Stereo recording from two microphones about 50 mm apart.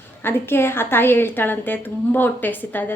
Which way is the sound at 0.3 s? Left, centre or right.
Left.